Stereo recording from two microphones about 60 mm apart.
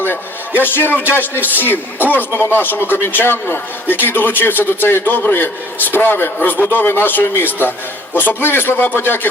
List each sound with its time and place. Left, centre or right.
0.6 s speech: left